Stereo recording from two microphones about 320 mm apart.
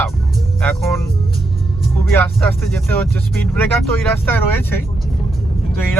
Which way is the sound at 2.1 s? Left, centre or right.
Centre.